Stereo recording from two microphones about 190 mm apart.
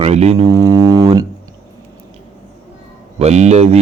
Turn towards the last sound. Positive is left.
turn(degrees=-35)  # may be behind; listen again after turning